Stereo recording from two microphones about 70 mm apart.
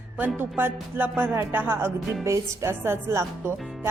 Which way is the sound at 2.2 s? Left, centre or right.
Right.